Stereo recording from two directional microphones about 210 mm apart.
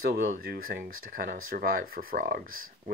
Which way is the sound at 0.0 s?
45° right (ahead or behind).